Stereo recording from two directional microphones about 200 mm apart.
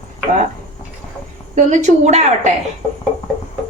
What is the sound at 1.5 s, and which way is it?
A woman's voice, 35° right (ahead or behind).